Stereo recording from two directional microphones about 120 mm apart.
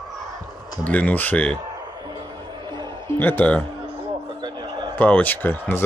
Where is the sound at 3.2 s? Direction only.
15° left (ahead or behind).